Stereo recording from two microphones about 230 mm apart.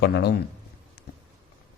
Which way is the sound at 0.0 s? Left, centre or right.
Left.